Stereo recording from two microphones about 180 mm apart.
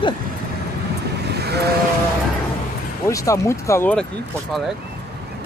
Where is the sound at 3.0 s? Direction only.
15° left (ahead or behind).